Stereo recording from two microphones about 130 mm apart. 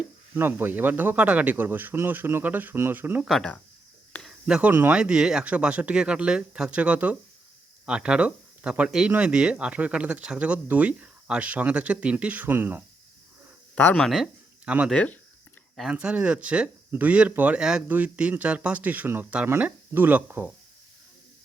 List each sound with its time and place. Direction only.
0.3 s speech: 15° right (ahead or behind)
3.2 s speech: 5° left (ahead or behind)
4.4 s speech: 5° right (ahead or behind)
4.7 s speech: 15° right (ahead or behind)
4.9 s speech: 5° right (ahead or behind)
13.7 s speech: 10° left (ahead or behind); by 14.8 s 10° right (ahead or behind)
14.8 s speech: 10° left (ahead or behind)
15.7 s speech: 5° right (ahead or behind)